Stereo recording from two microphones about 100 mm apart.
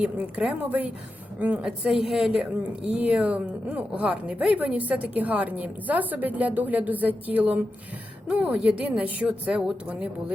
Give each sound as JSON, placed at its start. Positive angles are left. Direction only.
{"t": 0.0, "sound": "a woman's voice", "side_deg": -15}
{"t": 1.6, "sound": "a woman's voice", "side_deg": -5}